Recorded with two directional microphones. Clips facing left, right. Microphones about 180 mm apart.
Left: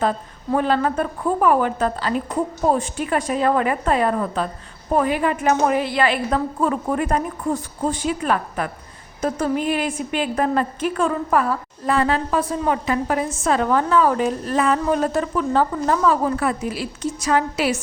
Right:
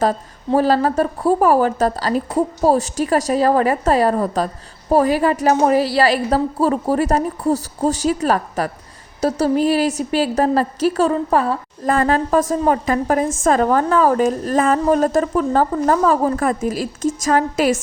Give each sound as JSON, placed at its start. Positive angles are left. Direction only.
{"t": 0.0, "sound": "a woman's voice", "side_deg": -35}
{"t": 11.9, "sound": "a woman's voice", "side_deg": -45}